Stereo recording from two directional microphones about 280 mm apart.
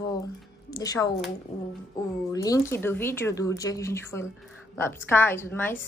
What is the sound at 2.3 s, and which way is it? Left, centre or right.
Speech, centre.